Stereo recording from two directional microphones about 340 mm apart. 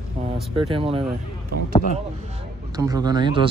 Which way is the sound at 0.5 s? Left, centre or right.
Centre.